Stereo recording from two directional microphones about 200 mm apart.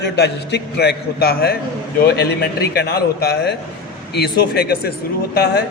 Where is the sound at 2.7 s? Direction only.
55° left (ahead or behind).